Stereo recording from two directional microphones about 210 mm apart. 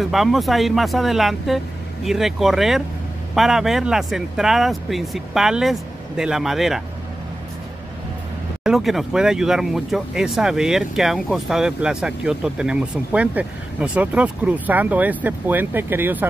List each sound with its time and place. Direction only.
0.0 s speech: centre (ahead or behind)
8.6 s speech: centre (ahead or behind)